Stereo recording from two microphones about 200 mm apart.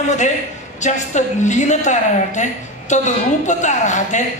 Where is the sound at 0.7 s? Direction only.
35° left (ahead or behind).